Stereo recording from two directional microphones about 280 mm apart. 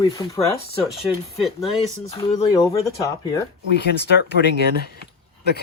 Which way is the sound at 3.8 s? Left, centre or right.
Left.